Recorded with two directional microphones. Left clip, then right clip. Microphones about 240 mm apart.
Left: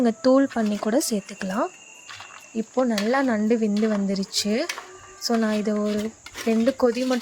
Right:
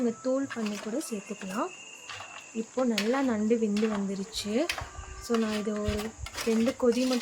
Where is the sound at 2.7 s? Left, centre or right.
Left.